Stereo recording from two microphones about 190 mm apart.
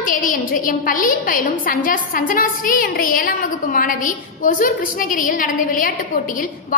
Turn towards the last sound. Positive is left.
turn(degrees=45)  # may be behind; listen again after turning